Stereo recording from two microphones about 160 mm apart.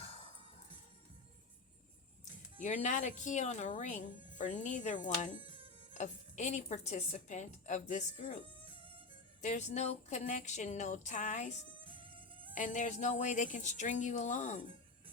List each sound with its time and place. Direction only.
2.6 s speech: 50° left (ahead or behind)
5.4 s music: 35° right (ahead or behind)
5.9 s speech: 50° left (ahead or behind)
8.6 s violin: 35° right (ahead or behind)
9.4 s speech: 50° left (ahead or behind)
12.5 s speech: 50° left (ahead or behind)